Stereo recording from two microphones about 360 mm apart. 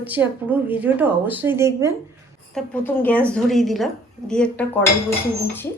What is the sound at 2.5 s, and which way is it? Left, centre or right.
A woman's voice, centre.